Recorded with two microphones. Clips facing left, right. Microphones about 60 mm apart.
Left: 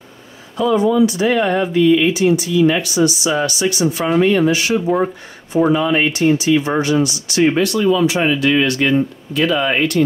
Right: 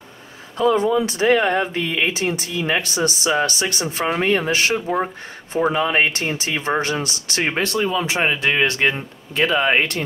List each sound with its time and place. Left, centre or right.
0.8 s speech: right
4.0 s speech: right